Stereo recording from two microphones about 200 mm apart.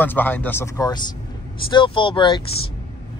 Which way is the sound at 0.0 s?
10° left (ahead or behind).